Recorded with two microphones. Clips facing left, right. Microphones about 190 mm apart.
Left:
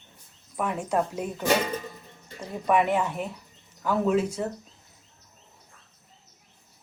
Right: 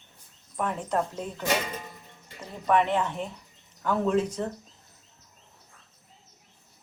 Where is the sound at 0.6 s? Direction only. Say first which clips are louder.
Left 2 dB; 10° left (ahead or behind).